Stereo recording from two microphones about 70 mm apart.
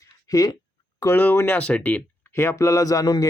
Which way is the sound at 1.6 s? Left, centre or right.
Left.